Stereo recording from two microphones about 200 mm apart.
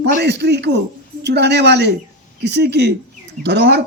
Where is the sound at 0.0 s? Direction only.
55° right (ahead or behind).